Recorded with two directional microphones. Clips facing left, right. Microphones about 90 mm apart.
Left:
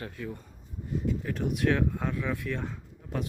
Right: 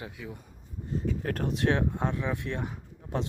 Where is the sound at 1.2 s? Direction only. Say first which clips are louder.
Right 2 dB; 50° right (ahead or behind).